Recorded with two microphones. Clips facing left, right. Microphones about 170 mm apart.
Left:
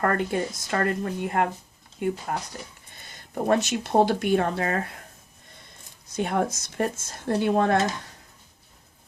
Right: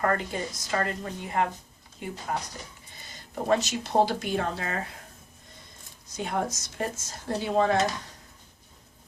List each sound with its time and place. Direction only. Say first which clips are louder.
0.0 s speech: left 3 dB; 55° left (ahead or behind)
3.4 s speech: left 3 dB; 55° left (ahead or behind)
6.1 s speech: left 4 dB; 55° left (ahead or behind)